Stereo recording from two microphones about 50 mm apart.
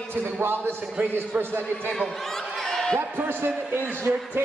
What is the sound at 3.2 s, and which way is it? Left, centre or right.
Speech, right.